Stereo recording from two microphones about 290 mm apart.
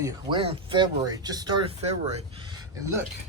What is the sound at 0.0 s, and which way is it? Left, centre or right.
Speech, centre.